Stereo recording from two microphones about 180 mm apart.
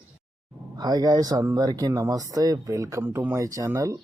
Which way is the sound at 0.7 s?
20° right (ahead or behind).